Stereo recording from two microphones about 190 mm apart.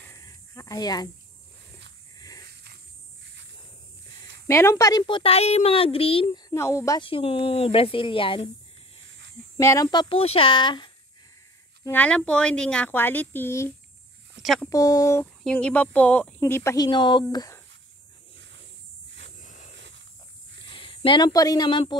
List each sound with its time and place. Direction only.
0.1 s a sound: 15° left (ahead or behind)
2.1 s a sound: 20° left (ahead or behind)
2.4 s a sound: 55° right (ahead or behind)
4.5 s speech: 15° left (ahead or behind)
6.5 s speech: 15° left (ahead or behind)
7.0 s speech: 30° left (ahead or behind)
9.6 s speech: 15° left (ahead or behind)
11.8 s speech: 10° left (ahead or behind)
14.4 s speech: centre (ahead or behind)
14.7 s speech: 20° left (ahead or behind)
15.4 s speech: 5° left (ahead or behind)
19.4 s a sound: 40° left (ahead or behind)
20.6 s speech: 25° left (ahead or behind)